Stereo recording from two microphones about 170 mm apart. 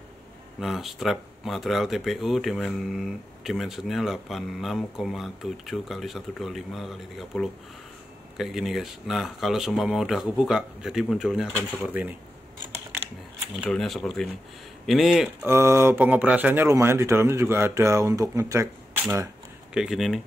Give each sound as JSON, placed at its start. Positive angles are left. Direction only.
{"t": 0.6, "sound": "speech", "side_deg": 0}
{"t": 11.9, "sound": "speech", "side_deg": -10}
{"t": 13.7, "sound": "speech", "side_deg": 0}
{"t": 15.4, "sound": "speech", "side_deg": -15}
{"t": 19.7, "sound": "speech", "side_deg": -5}